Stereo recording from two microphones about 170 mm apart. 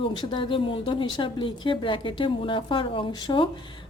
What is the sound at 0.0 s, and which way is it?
A woman's voice, 25° left (ahead or behind).